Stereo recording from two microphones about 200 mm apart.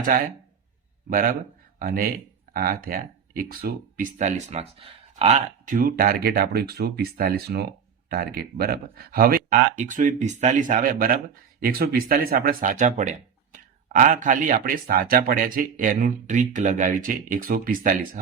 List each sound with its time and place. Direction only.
0.1 s speech: 45° right (ahead or behind)